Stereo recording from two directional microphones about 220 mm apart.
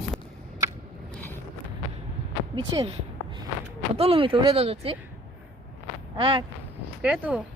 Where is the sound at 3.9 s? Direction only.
25° right (ahead or behind).